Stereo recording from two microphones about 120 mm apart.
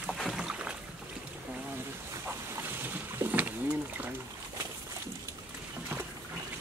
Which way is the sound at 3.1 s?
15° right (ahead or behind).